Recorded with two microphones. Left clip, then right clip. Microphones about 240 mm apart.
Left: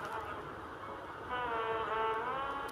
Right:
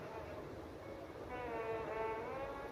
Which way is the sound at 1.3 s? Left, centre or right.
Centre.